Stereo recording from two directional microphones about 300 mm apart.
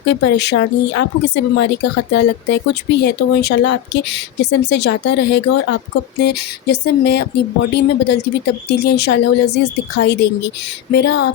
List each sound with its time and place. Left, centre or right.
0.0 s speech: left